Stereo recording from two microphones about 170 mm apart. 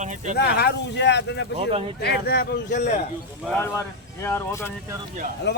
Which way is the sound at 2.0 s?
70° left (ahead or behind).